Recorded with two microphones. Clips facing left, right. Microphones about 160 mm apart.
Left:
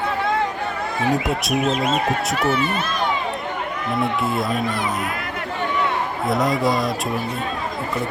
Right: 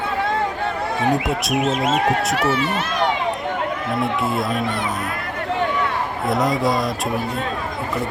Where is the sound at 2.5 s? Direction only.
80° right.